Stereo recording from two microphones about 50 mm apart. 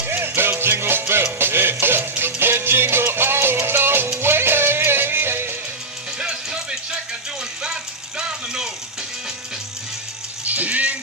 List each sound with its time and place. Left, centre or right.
0.0 s music: right
6.1 s music: centre
7.6 s a sound: centre
10.4 s rattle: right